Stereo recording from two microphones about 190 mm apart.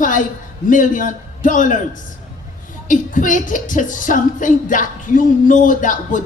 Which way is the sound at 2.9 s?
45° left (ahead or behind).